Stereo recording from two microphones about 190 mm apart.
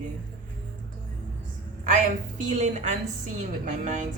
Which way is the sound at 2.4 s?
40° right (ahead or behind).